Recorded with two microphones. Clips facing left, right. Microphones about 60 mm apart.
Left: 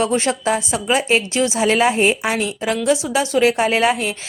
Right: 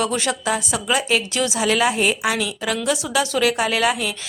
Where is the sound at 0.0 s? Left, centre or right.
Left.